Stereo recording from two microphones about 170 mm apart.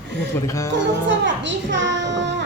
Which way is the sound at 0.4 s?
15° left (ahead or behind).